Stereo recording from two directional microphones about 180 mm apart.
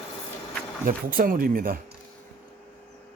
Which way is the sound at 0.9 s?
50° right (ahead or behind).